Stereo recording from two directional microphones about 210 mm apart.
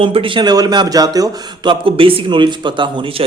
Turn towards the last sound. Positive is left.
turn(degrees=-25)  # may be behind; listen again after turning